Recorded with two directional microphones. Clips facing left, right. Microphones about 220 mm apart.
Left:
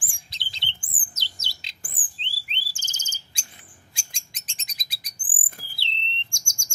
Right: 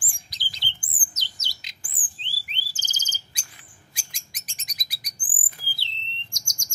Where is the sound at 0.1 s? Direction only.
25° left (ahead or behind).